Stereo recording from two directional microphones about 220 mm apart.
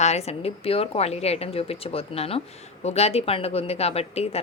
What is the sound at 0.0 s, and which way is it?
Speech, 30° left (ahead or behind).